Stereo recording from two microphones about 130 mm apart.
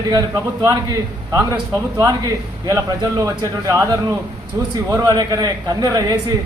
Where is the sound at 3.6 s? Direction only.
25° right (ahead or behind).